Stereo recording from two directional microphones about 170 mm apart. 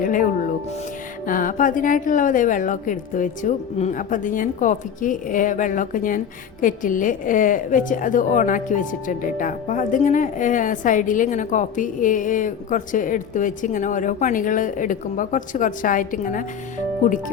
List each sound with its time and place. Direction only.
0.0 s speech: 50° left (ahead or behind)
1.3 s a woman's voice: 50° left (ahead or behind)